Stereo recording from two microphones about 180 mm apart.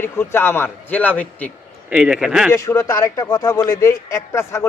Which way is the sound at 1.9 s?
5° right (ahead or behind).